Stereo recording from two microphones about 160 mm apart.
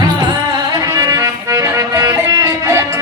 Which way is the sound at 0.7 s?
25° right (ahead or behind).